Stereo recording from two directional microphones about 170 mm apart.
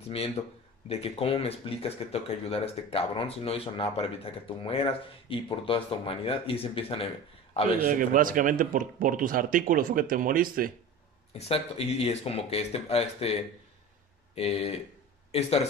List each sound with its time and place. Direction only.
0.8 s speech: 35° left (ahead or behind)
7.8 s speech: 50° right (ahead or behind)
11.3 s speech: 35° left (ahead or behind)